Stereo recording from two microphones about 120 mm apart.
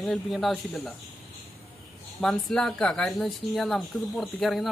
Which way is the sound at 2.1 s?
5° left (ahead or behind).